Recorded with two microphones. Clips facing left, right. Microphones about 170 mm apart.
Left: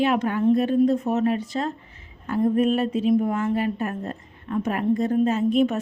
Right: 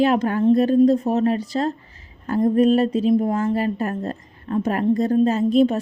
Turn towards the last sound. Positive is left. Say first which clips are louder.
# right 3 dB
turn(degrees=-35)  # may be behind; listen again after turning